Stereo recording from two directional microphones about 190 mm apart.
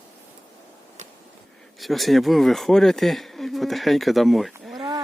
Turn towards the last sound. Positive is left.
turn(degrees=-25)  # may be behind; listen again after turning